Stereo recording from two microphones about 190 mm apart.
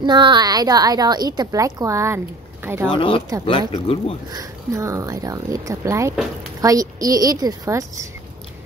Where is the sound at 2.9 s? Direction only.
30° left (ahead or behind).